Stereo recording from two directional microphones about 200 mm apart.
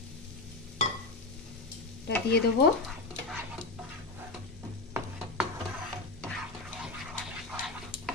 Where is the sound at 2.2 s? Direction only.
55° left (ahead or behind).